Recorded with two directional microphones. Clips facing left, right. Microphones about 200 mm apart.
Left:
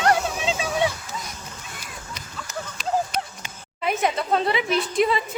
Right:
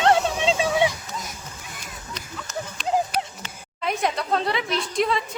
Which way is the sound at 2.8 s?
15° right (ahead or behind).